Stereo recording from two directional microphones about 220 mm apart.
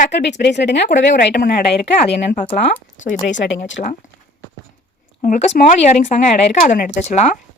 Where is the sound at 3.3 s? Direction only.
55° left (ahead or behind).